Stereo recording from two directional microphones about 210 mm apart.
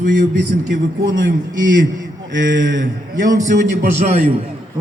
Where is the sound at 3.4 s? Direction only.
35° right (ahead or behind).